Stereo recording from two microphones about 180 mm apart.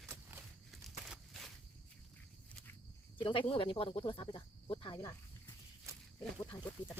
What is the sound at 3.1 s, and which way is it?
Speech, 30° left (ahead or behind).